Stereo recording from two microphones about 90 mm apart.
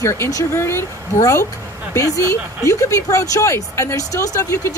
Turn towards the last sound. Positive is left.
turn(degrees=40)  # may be behind; listen again after turning